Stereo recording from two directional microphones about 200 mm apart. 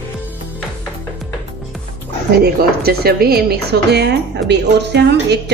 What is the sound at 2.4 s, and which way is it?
A woman's voice, 50° right (ahead or behind).